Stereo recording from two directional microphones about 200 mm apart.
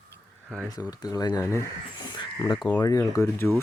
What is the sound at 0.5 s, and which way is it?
Speech, 10° right (ahead or behind).